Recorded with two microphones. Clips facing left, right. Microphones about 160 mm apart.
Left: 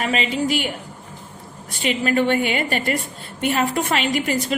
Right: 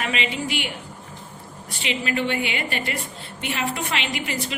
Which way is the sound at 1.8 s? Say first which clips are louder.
Left 6 dB; 45° left (ahead or behind).